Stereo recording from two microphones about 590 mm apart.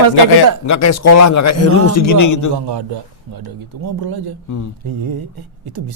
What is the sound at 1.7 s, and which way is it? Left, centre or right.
Speech, right.